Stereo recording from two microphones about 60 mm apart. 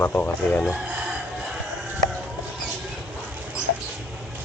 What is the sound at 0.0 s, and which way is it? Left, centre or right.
Speech, left.